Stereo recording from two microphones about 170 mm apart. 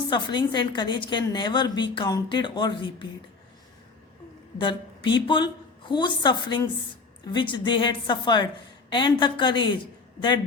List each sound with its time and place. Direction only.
0.1 s a woman's voice: 25° left (ahead or behind)
4.5 s a woman's voice: 30° left (ahead or behind)